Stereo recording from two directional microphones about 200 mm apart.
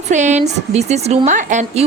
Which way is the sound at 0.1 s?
35° right (ahead or behind).